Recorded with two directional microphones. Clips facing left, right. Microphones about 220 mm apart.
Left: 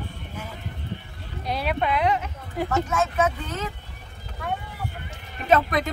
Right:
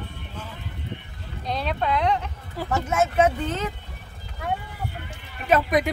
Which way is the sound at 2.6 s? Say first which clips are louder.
Left 4 dB; 20° left (ahead or behind).